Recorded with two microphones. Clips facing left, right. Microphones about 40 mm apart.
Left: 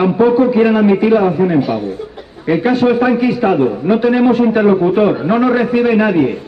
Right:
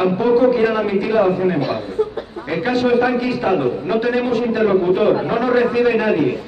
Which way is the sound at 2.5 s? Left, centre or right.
Centre.